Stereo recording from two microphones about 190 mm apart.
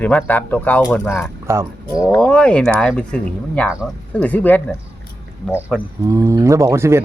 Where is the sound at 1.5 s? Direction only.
15° right (ahead or behind).